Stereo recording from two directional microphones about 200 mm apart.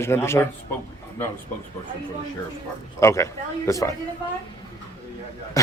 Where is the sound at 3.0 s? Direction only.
15° left (ahead or behind).